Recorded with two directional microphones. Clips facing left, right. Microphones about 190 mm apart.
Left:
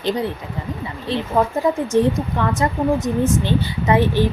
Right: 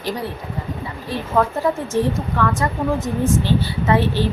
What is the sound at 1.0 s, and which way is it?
A woman's voice, 20° left (ahead or behind).